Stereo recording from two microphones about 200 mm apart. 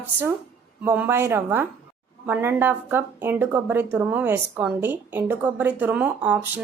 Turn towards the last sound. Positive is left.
turn(degrees=-10)  # may be behind; listen again after turning